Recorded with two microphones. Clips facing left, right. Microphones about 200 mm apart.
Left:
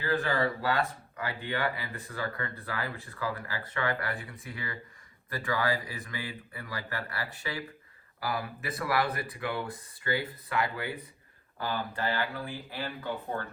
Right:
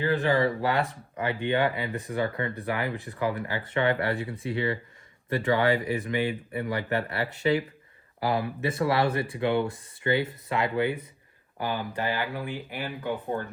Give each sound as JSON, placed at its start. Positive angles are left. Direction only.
{"t": 0.0, "sound": "speech", "side_deg": -20}